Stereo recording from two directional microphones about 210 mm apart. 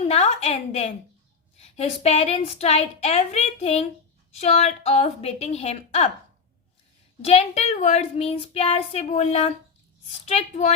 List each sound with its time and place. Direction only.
0.1 s a woman's voice: 30° left (ahead or behind)
7.2 s speech: 30° left (ahead or behind)